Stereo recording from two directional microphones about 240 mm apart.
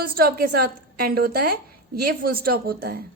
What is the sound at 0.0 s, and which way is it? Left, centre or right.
A woman's voice, right.